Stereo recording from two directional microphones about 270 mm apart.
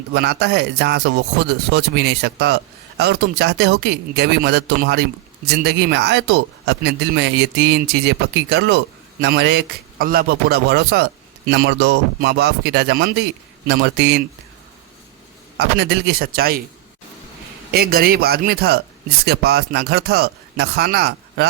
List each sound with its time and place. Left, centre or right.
0.1 s speech: right
15.5 s speech: right
17.7 s speech: right